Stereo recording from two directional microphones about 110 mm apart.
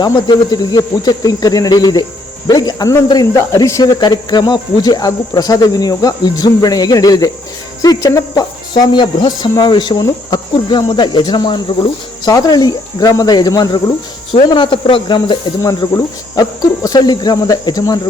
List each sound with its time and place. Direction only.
0.0 s speech: 40° left (ahead or behind)
14.5 s speech: 50° left (ahead or behind)